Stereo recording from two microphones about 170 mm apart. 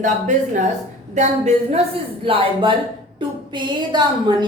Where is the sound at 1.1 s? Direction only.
45° right (ahead or behind).